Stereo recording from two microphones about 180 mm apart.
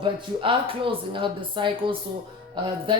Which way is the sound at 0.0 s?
30° right (ahead or behind).